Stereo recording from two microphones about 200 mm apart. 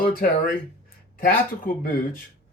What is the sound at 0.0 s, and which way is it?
Speech, 45° left (ahead or behind).